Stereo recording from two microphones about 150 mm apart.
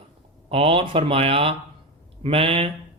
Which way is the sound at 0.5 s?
40° right (ahead or behind).